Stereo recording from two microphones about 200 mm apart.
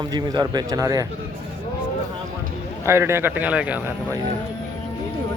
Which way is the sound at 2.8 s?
15° right (ahead or behind).